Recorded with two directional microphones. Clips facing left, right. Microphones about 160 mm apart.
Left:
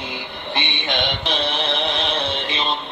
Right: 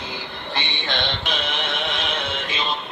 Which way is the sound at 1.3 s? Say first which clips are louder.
Left 4 dB; 35° left (ahead or behind).